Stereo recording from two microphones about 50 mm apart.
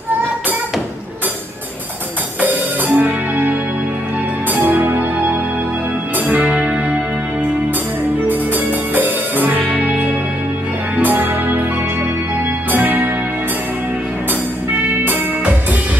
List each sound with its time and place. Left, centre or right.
2.4 s music: right
8.3 s music: right
12.7 s music: right